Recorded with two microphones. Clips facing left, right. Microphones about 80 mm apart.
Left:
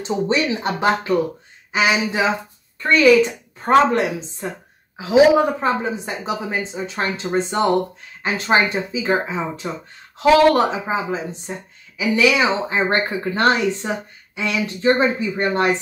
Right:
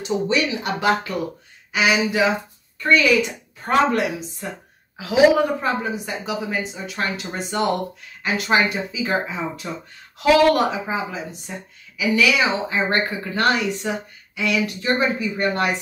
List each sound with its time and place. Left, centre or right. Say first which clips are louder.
0.0 s a woman's voice: left 1 dB; left